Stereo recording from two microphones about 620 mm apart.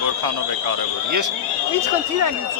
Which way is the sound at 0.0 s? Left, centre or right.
Right.